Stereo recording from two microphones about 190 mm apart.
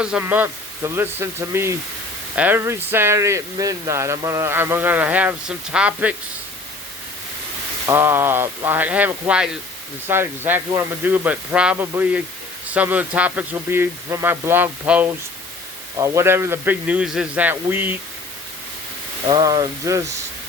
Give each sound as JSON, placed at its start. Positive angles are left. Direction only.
{"t": 0.0, "sound": "speech", "side_deg": -10}
{"t": 7.9, "sound": "speech", "side_deg": -10}
{"t": 19.3, "sound": "speech", "side_deg": -20}